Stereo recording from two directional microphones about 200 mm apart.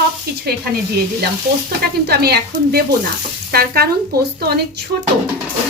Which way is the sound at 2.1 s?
50° right (ahead or behind).